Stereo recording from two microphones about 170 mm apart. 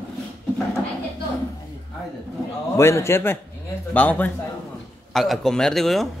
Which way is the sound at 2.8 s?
15° left (ahead or behind).